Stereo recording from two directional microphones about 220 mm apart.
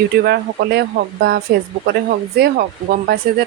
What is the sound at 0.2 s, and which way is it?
Speech, 45° right (ahead or behind).